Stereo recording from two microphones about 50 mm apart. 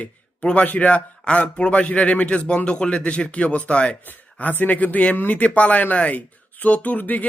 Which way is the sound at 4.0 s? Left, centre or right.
Left.